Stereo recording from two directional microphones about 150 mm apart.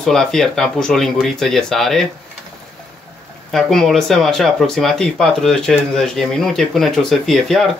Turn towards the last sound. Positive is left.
turn(degrees=0)  # may be behind; listen again after turning